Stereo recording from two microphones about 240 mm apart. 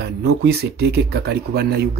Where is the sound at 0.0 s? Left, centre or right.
Right.